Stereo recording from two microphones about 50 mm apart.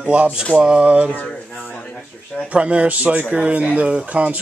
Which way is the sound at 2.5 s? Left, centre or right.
Right.